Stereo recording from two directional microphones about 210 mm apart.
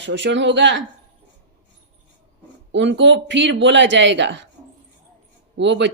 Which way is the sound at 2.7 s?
60° right (ahead or behind).